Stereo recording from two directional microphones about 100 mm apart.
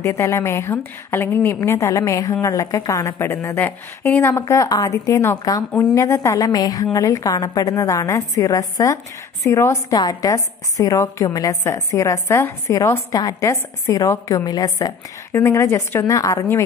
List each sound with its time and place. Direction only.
0.0 s a woman's voice: 30° left (ahead or behind)
15.3 s a woman's voice: 25° left (ahead or behind)
16.1 s a woman's voice: 35° left (ahead or behind)